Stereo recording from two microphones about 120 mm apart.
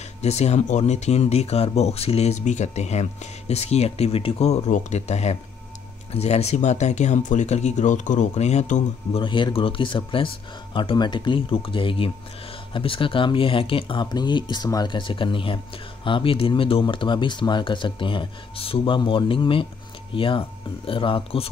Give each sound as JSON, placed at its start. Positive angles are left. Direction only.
{"t": 0.2, "sound": "speech", "side_deg": 65}
{"t": 9.1, "sound": "speech", "side_deg": 45}